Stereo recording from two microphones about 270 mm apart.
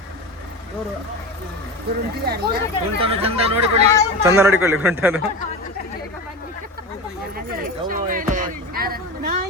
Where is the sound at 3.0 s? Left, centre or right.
Right.